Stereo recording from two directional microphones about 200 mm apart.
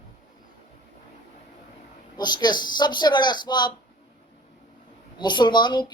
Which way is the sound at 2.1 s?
20° left (ahead or behind).